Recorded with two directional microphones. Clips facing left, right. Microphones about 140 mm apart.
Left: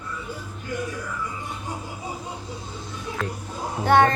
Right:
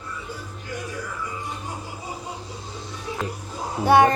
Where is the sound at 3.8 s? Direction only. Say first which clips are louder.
Right 2 dB; 15° right (ahead or behind).